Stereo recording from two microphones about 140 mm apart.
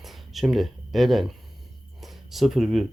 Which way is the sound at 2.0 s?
Centre (ahead or behind).